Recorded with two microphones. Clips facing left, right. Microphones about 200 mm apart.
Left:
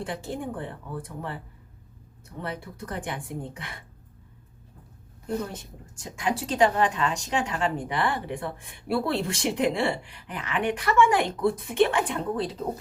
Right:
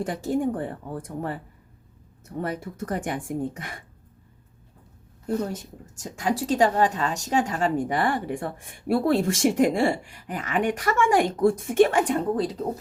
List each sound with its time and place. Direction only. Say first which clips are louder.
0.0 s a woman's voice: right 7 dB; 45° right (ahead or behind)
2.4 s a woman's voice: right 5 dB; 45° right (ahead or behind)
5.5 s a woman's voice: right 6 dB; 40° right (ahead or behind)